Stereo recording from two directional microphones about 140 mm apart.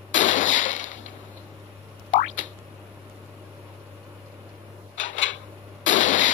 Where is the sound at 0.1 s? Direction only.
60° left (ahead or behind).